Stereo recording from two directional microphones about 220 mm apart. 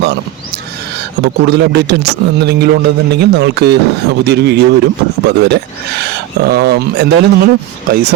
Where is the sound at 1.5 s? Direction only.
50° right (ahead or behind).